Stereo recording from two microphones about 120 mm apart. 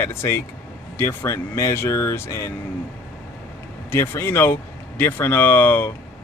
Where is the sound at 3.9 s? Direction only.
20° left (ahead or behind).